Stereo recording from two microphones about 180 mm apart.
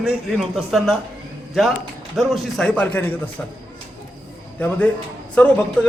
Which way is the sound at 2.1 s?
Centre (ahead or behind).